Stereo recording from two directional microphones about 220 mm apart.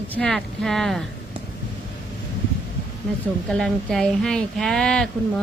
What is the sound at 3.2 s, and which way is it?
A woman's voice, centre (ahead or behind).